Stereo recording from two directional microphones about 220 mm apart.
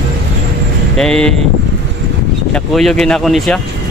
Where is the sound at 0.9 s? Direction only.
5° left (ahead or behind).